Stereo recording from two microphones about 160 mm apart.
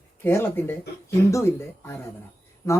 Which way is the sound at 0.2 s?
15° left (ahead or behind).